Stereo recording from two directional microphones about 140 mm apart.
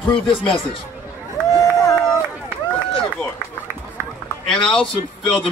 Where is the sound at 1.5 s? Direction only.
25° left (ahead or behind).